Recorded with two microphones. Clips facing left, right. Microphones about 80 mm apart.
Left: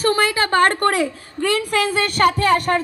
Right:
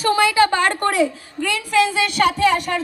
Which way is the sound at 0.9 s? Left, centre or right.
Left.